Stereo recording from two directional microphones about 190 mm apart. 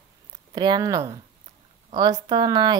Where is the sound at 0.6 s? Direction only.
20° right (ahead or behind).